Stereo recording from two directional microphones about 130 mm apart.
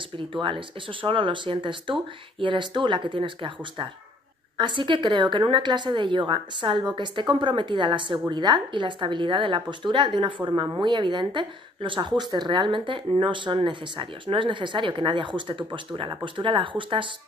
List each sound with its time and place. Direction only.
0.2 s speech: 40° right (ahead or behind)